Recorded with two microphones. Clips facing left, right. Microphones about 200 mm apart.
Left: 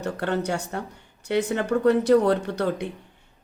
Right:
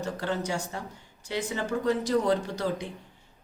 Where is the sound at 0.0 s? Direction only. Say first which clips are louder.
Left 5 dB; 65° left (ahead or behind).